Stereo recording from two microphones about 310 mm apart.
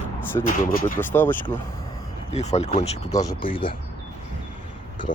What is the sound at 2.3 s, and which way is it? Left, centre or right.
Speech, left.